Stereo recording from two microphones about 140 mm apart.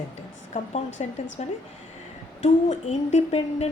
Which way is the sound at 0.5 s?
55° left (ahead or behind).